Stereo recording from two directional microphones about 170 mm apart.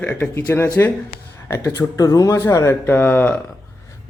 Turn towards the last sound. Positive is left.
turn(degrees=10)  # may be behind; listen again after turning